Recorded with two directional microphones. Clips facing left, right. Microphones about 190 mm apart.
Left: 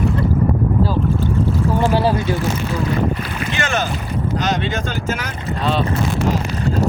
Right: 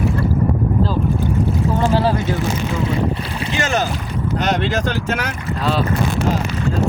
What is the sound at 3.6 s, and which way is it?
Speech, 40° right (ahead or behind).